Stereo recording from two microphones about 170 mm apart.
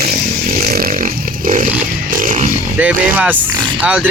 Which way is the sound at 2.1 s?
50° right (ahead or behind).